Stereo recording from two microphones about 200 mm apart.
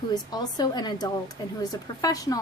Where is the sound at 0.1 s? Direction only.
20° left (ahead or behind).